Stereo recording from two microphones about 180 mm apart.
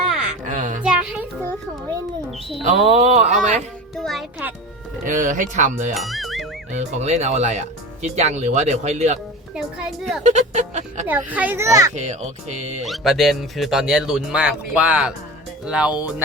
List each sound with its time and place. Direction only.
0.1 s a sound: 5° right (ahead or behind)
0.5 s a sound: 45° right (ahead or behind)
0.8 s music: 5° right (ahead or behind)
2.6 s speech: 35° right (ahead or behind)
3.9 s a child's voice: centre (ahead or behind)
5.0 s speech: 45° right (ahead or behind)
5.9 s speech: centre (ahead or behind)
6.7 s speech: 40° right (ahead or behind)
9.6 s speech: centre (ahead or behind)
10.2 s speech: 40° right (ahead or behind)
11.0 s a child's voice: 10° right (ahead or behind)
11.9 s speech: 40° right (ahead or behind)
12.8 s a child's voice: centre (ahead or behind)